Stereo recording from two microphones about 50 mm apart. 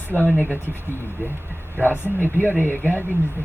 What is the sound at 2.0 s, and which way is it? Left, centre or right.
Speech, left.